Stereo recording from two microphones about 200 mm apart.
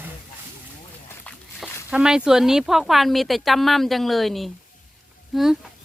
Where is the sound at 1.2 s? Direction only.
5° left (ahead or behind).